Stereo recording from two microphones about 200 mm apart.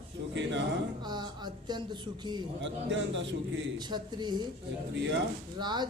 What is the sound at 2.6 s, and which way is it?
Speech, 65° right (ahead or behind).